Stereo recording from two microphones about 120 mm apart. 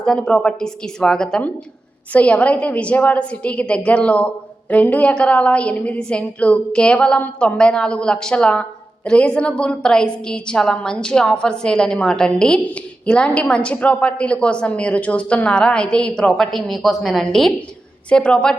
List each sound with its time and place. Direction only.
0.0 s a woman's voice: 5° left (ahead or behind)